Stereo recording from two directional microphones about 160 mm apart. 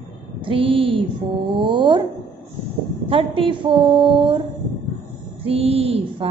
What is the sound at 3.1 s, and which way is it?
A woman's voice, 35° right (ahead or behind).